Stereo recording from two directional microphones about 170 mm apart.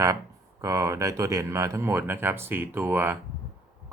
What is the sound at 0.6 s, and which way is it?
Speech, 20° right (ahead or behind).